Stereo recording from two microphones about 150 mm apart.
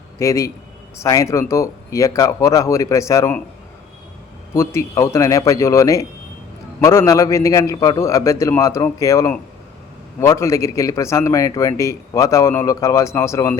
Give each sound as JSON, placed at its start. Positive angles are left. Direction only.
{"t": 0.2, "sound": "a man's voice", "side_deg": 20}
{"t": 4.5, "sound": "a man's voice", "side_deg": 20}